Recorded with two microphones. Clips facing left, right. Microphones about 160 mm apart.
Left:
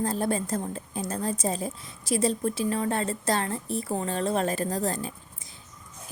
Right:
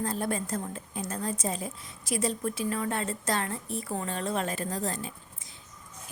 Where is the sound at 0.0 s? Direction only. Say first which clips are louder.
Left 4 dB; 35° left (ahead or behind).